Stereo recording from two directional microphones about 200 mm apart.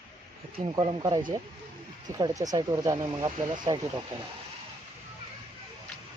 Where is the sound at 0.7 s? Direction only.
20° right (ahead or behind).